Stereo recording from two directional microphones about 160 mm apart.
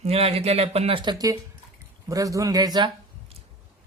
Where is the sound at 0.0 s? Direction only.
40° right (ahead or behind).